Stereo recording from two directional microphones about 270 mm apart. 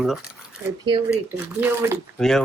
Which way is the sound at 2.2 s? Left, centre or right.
Centre.